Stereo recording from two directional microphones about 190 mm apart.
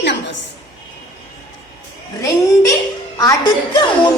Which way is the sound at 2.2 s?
15° left (ahead or behind).